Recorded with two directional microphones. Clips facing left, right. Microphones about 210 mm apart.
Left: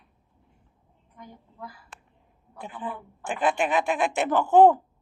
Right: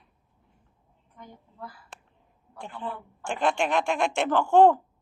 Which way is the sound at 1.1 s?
15° left (ahead or behind).